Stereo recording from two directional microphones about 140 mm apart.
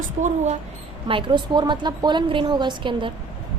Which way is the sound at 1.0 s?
35° right (ahead or behind).